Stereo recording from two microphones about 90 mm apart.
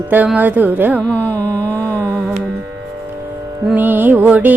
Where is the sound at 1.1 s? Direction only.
20° left (ahead or behind).